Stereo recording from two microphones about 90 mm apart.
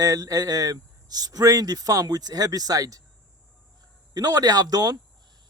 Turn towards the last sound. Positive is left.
turn(degrees=-45)  # may be behind; listen again after turning